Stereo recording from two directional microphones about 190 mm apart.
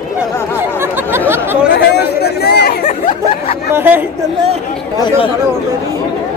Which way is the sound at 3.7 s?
10° right (ahead or behind).